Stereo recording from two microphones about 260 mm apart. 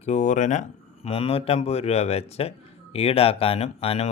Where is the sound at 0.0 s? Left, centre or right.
Left.